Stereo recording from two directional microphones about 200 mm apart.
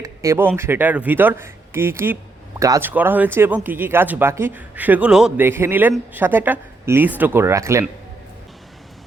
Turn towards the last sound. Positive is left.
turn(degrees=-15)  # may be behind; listen again after turning